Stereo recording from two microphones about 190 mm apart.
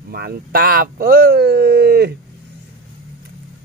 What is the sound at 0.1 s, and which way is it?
Speech, 55° right (ahead or behind).